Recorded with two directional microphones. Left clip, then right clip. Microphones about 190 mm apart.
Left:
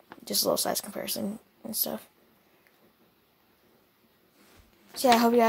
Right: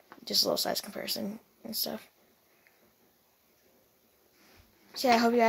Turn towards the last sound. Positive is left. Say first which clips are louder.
# left 3 dB
turn(degrees=20)  # may be behind; listen again after turning